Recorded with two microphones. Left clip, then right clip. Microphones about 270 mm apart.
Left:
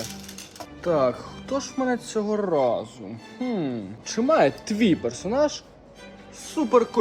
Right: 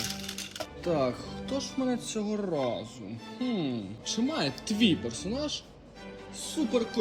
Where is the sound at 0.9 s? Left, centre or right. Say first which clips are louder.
Left 7 dB; centre.